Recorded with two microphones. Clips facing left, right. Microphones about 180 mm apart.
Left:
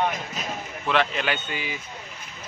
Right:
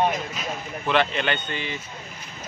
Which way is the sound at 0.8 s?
Centre (ahead or behind).